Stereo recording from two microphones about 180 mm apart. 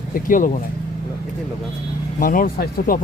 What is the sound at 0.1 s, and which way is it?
Speech, 50° left (ahead or behind).